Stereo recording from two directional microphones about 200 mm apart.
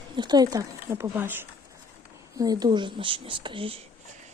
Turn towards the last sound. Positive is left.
turn(degrees=-25)  # may be behind; listen again after turning